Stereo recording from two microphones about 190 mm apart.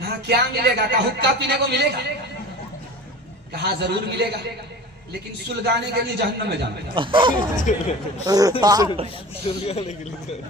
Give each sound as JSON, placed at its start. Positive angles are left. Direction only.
{"t": 0.0, "sound": "a man's voice", "side_deg": -60}
{"t": 3.5, "sound": "a man's voice", "side_deg": -60}
{"t": 5.6, "sound": "a man's voice", "side_deg": -60}
{"t": 7.0, "sound": "a man's voice", "side_deg": -25}
{"t": 7.5, "sound": "speech", "side_deg": 40}
{"t": 8.3, "sound": "a man's voice", "side_deg": -20}
{"t": 9.5, "sound": "speech", "side_deg": 35}